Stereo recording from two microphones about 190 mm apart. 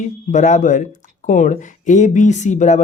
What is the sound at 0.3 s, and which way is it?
Speech, 40° left (ahead or behind).